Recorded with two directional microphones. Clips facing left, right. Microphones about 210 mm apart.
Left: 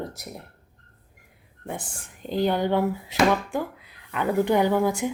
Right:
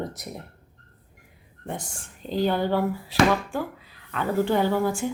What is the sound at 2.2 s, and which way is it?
Speech, 15° left (ahead or behind).